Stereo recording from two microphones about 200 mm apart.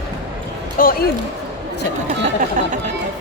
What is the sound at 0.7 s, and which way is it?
Speech, 45° left (ahead or behind).